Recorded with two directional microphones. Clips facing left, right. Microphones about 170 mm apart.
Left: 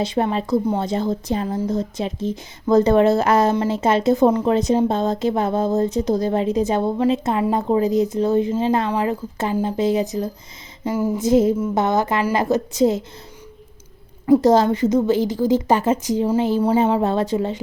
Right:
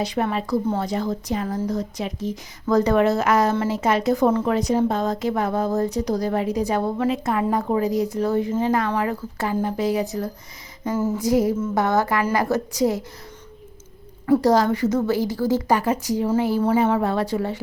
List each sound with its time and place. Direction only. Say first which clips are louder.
0.0 s speech: left 3 dB; 25° left (ahead or behind)
10.8 s a sound: left 2 dB; 10° left (ahead or behind)
11.2 s speech: left 5 dB; 25° left (ahead or behind)
14.3 s speech: left 3 dB; 20° left (ahead or behind)